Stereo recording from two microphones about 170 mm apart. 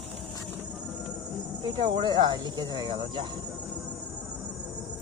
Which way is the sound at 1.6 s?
25° right (ahead or behind).